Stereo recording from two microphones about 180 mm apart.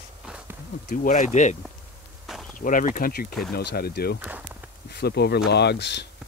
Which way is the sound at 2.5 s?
45° left (ahead or behind).